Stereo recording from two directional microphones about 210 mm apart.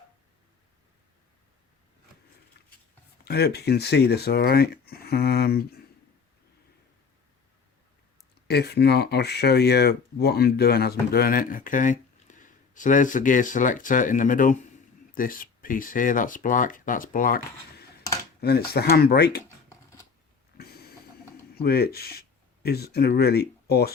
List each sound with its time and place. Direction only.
3.2 s speech: 50° left (ahead or behind)
8.4 s speech: 50° left (ahead or behind)
20.6 s a sound: 50° left (ahead or behind)
21.5 s speech: 50° left (ahead or behind)